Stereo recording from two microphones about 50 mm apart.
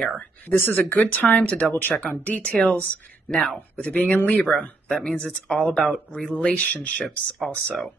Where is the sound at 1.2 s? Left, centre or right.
Left.